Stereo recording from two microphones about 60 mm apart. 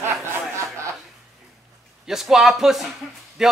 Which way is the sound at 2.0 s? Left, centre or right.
Centre.